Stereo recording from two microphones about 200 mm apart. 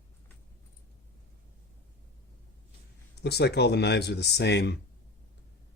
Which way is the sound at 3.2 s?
55° left (ahead or behind).